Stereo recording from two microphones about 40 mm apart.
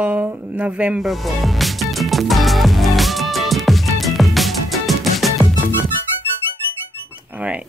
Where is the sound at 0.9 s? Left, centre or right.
Centre.